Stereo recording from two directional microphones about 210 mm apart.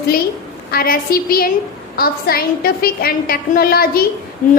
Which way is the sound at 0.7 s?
45° left (ahead or behind).